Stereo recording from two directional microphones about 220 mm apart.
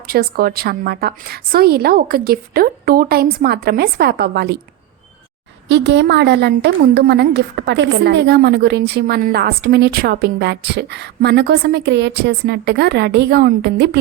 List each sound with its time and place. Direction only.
0.1 s a woman's voice: 45° right (ahead or behind)
5.6 s a woman's voice: 55° right (ahead or behind)